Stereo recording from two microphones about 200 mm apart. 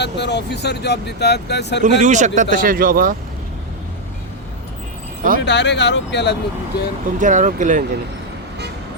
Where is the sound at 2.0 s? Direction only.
35° right (ahead or behind).